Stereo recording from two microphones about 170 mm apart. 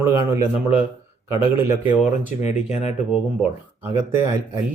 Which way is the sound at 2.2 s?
40° left (ahead or behind).